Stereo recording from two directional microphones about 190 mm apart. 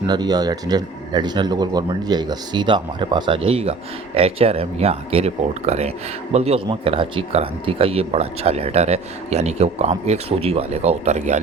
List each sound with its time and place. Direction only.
0.1 s speech: 20° right (ahead or behind); by 11.3 s 35° right (ahead or behind)